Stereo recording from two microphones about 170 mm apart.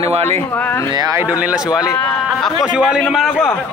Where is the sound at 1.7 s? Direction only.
25° left (ahead or behind).